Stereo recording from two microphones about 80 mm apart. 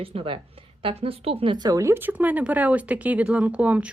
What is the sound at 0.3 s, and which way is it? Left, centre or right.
Speech, right.